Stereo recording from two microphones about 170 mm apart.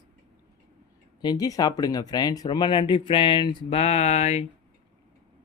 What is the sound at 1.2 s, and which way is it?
Speech, 25° left (ahead or behind).